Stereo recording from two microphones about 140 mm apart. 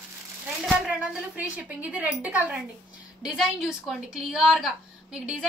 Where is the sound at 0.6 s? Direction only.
5° right (ahead or behind).